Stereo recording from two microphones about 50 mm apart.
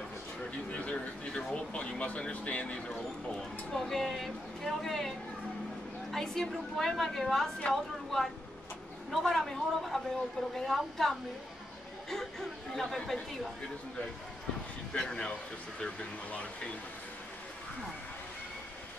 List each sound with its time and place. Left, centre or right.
0.7 s speech: left
3.3 s a woman's voice: centre
6.1 s a woman's voice: centre
15.0 s a woman's voice: centre